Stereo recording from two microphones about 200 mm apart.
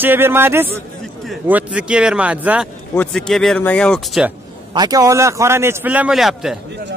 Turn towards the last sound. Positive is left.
turn(degrees=0)  # may be behind; listen again after turning